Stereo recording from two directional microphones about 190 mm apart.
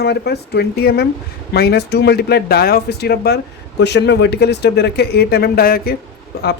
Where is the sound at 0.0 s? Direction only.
60° left (ahead or behind).